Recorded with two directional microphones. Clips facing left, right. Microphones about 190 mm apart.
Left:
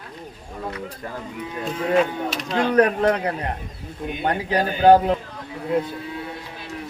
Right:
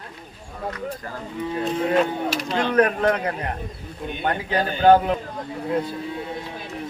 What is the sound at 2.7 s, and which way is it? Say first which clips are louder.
A man's voice: left 1 dB; 30° left (ahead or behind).